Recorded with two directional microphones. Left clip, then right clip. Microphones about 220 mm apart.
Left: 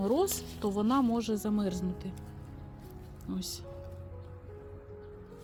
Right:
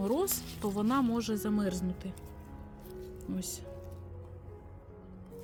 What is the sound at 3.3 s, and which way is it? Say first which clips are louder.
Speech: left 3 dB; centre (ahead or behind).